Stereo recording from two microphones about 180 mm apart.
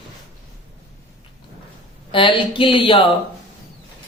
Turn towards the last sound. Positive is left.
turn(degrees=30)  # may be behind; listen again after turning